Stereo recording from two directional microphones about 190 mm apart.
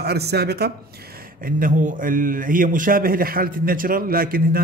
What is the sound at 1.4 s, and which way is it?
Speech, 45° right (ahead or behind).